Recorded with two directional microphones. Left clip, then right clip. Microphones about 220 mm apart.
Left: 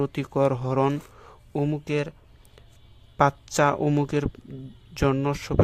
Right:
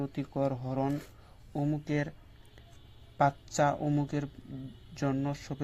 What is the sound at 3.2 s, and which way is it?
Speech, 30° left (ahead or behind).